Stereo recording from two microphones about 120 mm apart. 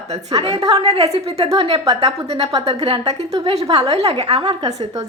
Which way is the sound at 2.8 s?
55° right (ahead or behind).